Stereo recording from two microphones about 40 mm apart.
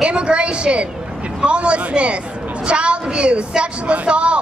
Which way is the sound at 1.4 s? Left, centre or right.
Right.